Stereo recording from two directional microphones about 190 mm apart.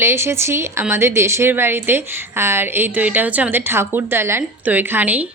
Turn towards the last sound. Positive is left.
turn(degrees=-10)  # may be behind; listen again after turning